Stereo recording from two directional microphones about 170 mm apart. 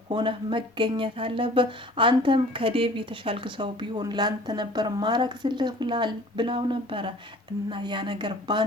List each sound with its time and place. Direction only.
0.1 s speech: 30° right (ahead or behind)